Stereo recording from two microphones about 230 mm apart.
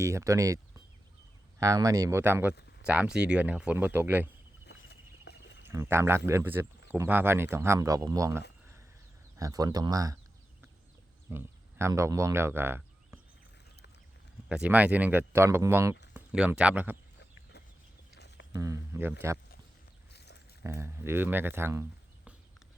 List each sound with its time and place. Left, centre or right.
0.0 s speech: centre
5.3 s a sound: left
5.6 s speech: centre
11.3 s speech: centre
14.5 s speech: centre
16.1 s a sound: centre
18.5 s speech: centre
20.1 s a sound: left
20.7 s speech: centre